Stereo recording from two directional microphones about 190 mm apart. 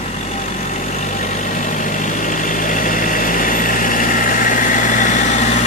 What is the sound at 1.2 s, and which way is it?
Vehicle, 40° left (ahead or behind).